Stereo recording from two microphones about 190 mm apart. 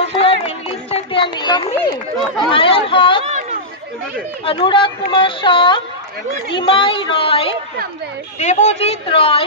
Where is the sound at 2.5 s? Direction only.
30° left (ahead or behind).